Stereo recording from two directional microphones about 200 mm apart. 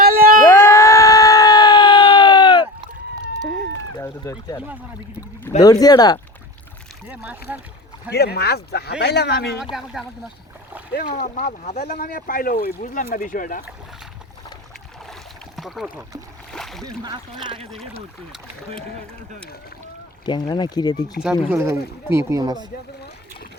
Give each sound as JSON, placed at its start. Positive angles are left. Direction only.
{"t": 0.0, "sound": "a sound", "side_deg": -50}
{"t": 0.4, "sound": "a sound", "side_deg": 15}
{"t": 3.9, "sound": "a sound", "side_deg": 15}
{"t": 5.4, "sound": "speech", "side_deg": 20}
{"t": 7.1, "sound": "speech", "side_deg": -5}
{"t": 8.1, "sound": "speech", "side_deg": 55}
{"t": 9.7, "sound": "speech", "side_deg": 0}
{"t": 11.2, "sound": "speech", "side_deg": 45}
{"t": 15.5, "sound": "speech", "side_deg": 0}
{"t": 16.5, "sound": "splash", "side_deg": 0}
{"t": 16.8, "sound": "speech", "side_deg": -20}
{"t": 20.2, "sound": "speech", "side_deg": 20}
{"t": 21.5, "sound": "speech", "side_deg": -15}